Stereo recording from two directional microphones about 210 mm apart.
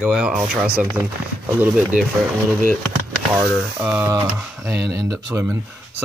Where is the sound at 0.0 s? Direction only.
5° right (ahead or behind).